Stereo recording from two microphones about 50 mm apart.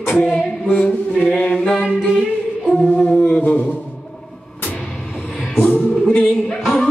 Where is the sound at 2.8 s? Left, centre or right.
Centre.